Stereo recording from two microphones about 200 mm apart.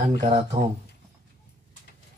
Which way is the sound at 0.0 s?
35° right (ahead or behind).